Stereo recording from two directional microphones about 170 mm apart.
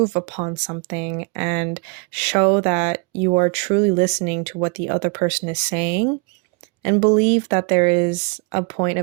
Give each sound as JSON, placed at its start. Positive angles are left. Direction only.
{"t": 0.0, "sound": "speech", "side_deg": -40}